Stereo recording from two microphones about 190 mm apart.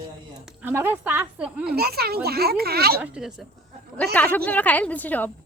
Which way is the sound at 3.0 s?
5° right (ahead or behind).